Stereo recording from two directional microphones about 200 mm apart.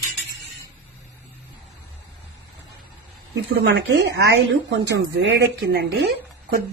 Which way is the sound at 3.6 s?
60° right (ahead or behind).